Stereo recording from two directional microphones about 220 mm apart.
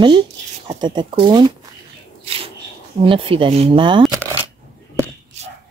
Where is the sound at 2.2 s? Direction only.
25° right (ahead or behind).